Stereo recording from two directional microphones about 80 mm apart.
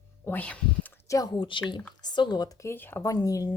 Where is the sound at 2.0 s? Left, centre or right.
Left.